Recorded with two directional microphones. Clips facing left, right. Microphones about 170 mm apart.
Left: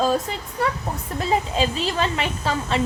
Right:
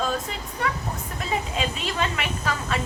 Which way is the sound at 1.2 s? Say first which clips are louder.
Left 6 dB; 35° left (ahead or behind).